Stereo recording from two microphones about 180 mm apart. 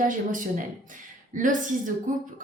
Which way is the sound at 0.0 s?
45° right (ahead or behind).